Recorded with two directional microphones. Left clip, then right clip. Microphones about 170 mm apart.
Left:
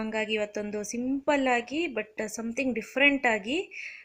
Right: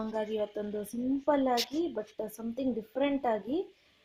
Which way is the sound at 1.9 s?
20° left (ahead or behind).